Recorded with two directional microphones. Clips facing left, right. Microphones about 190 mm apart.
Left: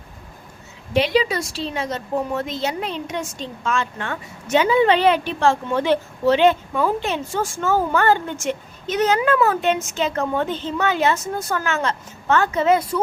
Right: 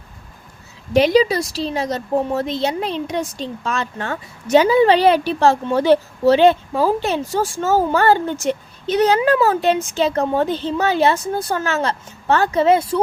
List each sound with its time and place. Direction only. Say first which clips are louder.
0.9 s a woman's voice: right 5 dB; 40° right (ahead or behind)